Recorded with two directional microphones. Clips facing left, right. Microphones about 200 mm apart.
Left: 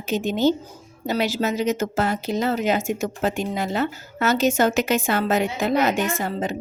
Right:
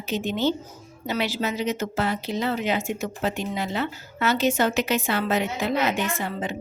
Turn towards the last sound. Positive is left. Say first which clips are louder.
# left 3 dB
turn(degrees=40)  # may be behind; listen again after turning